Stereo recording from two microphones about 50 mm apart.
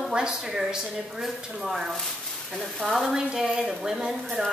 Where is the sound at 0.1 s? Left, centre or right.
Centre.